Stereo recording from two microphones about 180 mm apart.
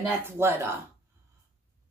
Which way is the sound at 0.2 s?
15° right (ahead or behind).